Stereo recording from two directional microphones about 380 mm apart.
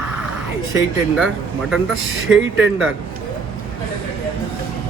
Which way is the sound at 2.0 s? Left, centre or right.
Right.